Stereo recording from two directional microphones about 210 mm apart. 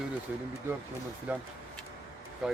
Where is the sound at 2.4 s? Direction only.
Centre (ahead or behind).